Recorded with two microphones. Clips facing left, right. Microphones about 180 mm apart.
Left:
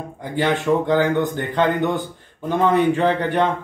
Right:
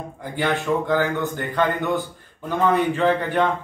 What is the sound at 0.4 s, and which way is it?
A man's voice, 20° left (ahead or behind).